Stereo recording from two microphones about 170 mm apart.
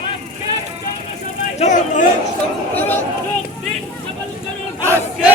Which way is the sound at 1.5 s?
45° left (ahead or behind).